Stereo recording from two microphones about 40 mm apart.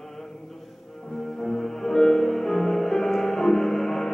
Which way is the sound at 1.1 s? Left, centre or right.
Centre.